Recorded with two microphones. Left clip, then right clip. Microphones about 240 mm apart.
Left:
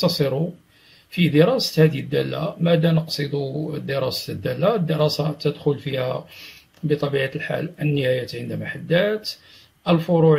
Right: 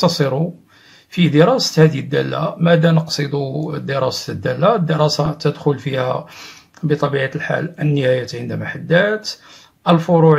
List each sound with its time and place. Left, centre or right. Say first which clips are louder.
0.0 s speech: right 4 dB; centre
3.3 s speech: right 4 dB; right
3.7 s speech: right 5 dB; centre
10.0 s speech: right 4 dB; right